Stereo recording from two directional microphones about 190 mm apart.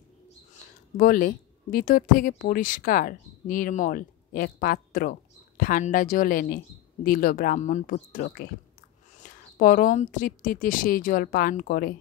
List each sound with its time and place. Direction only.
0.9 s speech: 50° left (ahead or behind)